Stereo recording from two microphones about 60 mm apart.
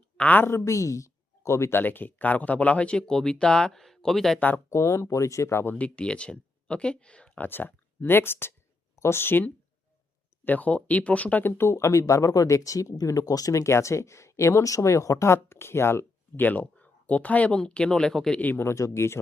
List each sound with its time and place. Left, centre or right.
0.2 s a woman's voice: left
0.4 s speech: left
1.8 s speech: left; by 4.4 s centre
4.4 s speech: left
4.7 s speech: left
5.7 s speech: left
7.3 s speech: left
11.4 s speech: left
16.5 s speech: left
18.3 s speech: left
18.6 s speech: left